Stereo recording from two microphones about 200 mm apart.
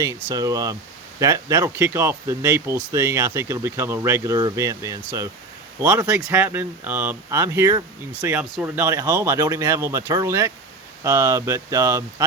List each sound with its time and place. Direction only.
0.0 s speech: 15° right (ahead or behind)